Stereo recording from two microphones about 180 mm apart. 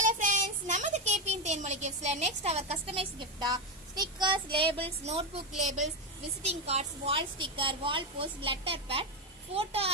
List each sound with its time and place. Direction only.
0.0 s a woman's voice: 45° right (ahead or behind)